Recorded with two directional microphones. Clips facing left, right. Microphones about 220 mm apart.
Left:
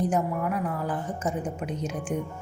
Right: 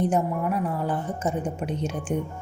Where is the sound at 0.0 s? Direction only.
30° right (ahead or behind).